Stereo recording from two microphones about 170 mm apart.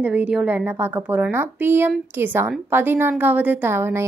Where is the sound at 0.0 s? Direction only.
5° right (ahead or behind).